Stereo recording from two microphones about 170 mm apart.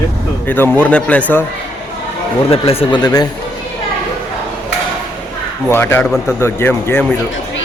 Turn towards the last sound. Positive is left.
turn(degrees=15)  # may be behind; listen again after turning